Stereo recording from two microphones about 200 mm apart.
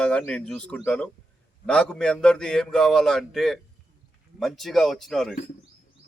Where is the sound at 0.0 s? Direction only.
5° left (ahead or behind).